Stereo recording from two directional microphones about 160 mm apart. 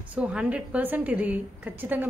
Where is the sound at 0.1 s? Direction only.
5° right (ahead or behind).